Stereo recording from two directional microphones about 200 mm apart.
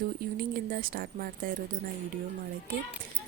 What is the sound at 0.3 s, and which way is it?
Speech, 45° right (ahead or behind).